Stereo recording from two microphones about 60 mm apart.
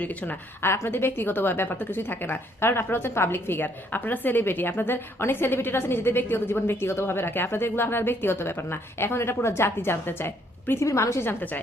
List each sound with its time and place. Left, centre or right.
0.0 s a woman's voice: left
0.6 s a woman's voice: left
10.8 s a woman's voice: left
11.2 s a woman's voice: left